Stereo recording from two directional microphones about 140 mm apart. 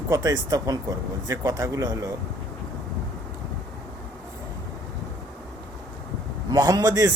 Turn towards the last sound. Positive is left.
turn(degrees=-25)  # may be behind; listen again after turning